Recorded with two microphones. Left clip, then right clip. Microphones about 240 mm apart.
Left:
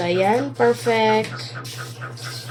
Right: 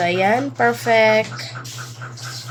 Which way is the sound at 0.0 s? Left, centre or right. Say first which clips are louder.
Right 2 dB; right.